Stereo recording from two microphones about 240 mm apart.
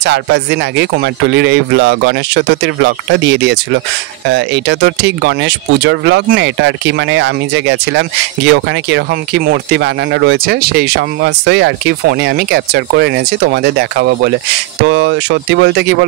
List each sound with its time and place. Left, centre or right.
0.0 s speech: right